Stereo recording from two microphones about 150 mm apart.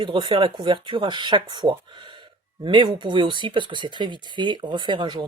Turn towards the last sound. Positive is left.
turn(degrees=-30)  # may be behind; listen again after turning